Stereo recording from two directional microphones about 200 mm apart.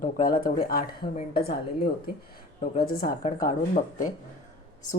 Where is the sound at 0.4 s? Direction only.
45° left (ahead or behind).